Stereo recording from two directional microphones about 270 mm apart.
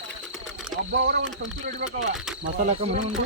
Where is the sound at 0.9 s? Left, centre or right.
Right.